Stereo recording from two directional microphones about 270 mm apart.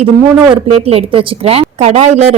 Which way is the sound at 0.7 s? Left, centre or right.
Right.